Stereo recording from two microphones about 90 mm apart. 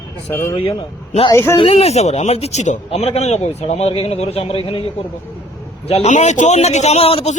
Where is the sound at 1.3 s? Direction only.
30° left (ahead or behind).